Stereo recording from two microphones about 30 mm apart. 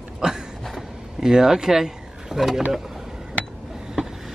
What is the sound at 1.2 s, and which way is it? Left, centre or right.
Speech, centre.